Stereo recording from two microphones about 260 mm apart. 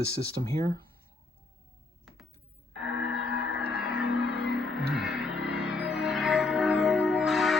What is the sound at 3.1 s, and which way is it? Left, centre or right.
Music, left.